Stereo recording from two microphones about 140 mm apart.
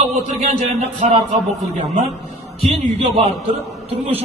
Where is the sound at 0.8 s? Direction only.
50° right (ahead or behind).